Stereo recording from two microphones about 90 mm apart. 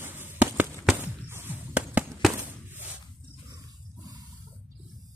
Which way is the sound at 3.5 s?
45° right (ahead or behind).